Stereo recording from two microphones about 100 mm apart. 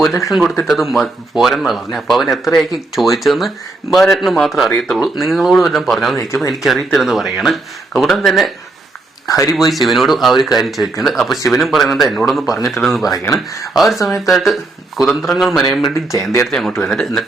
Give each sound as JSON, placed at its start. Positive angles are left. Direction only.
{"t": 0.3, "sound": "speech", "side_deg": 0}
{"t": 6.1, "sound": "speech", "side_deg": 30}
{"t": 6.5, "sound": "speech", "side_deg": 0}
{"t": 9.3, "sound": "speech", "side_deg": 35}
{"t": 9.6, "sound": "speech", "side_deg": 0}